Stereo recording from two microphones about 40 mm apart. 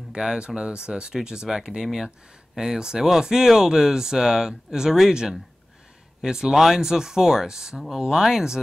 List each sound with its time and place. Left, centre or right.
0.1 s speech: centre
6.2 s speech: centre